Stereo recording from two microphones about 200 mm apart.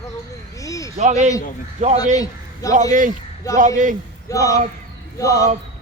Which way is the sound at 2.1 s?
15° left (ahead or behind).